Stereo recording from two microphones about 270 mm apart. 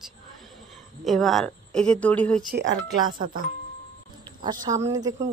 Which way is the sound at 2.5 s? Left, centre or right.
Right.